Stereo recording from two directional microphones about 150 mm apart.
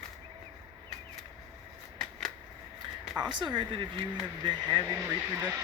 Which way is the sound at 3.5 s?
30° right (ahead or behind).